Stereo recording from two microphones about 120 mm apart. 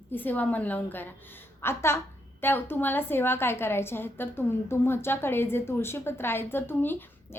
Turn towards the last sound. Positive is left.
turn(degrees=15)  # may be behind; listen again after turning